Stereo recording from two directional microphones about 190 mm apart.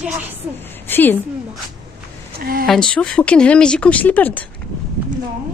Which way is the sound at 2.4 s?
50° right (ahead or behind).